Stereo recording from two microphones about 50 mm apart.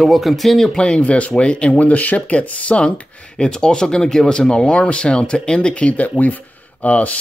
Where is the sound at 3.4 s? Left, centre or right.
Centre.